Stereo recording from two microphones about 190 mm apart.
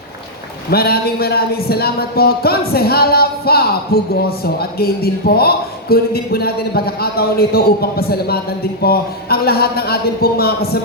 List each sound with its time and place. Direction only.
0.7 s a man's voice: 55° left (ahead or behind)